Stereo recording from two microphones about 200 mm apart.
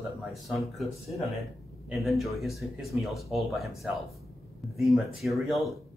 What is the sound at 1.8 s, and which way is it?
Speech, centre (ahead or behind).